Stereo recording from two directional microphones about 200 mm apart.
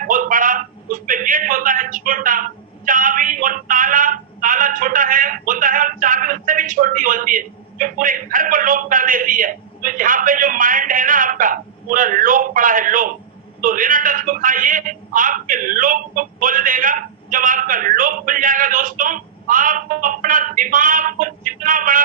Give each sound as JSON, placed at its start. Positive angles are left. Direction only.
{"t": 0.1, "sound": "a man's voice", "side_deg": -40}